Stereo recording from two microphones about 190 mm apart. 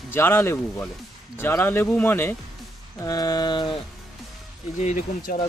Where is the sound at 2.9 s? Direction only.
20° left (ahead or behind).